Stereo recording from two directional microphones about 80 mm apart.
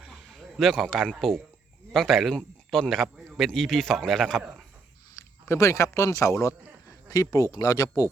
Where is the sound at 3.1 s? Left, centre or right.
Centre.